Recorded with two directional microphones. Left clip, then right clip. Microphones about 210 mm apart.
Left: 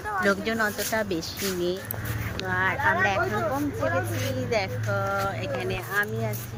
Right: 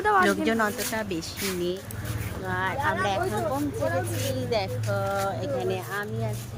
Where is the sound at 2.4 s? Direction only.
5° right (ahead or behind).